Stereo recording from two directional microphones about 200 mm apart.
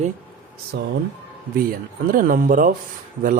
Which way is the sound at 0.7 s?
60° right (ahead or behind).